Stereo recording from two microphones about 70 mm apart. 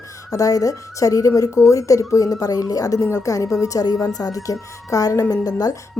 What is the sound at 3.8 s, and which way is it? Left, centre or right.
A woman's voice, left.